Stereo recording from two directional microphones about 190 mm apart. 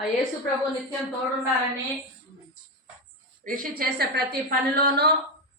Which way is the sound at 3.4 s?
45° right (ahead or behind).